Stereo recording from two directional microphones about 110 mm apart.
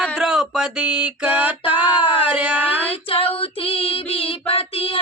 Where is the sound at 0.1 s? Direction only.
5° right (ahead or behind).